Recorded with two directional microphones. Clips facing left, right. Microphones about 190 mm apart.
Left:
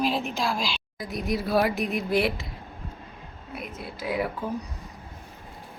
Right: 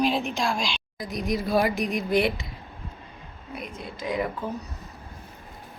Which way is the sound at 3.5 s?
5° left (ahead or behind).